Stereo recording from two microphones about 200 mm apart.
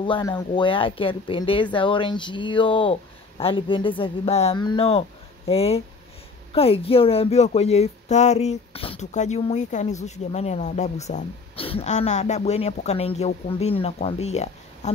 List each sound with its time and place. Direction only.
0.0 s speech: 25° left (ahead or behind)